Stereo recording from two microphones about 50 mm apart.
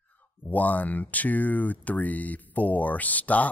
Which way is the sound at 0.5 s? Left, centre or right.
Left.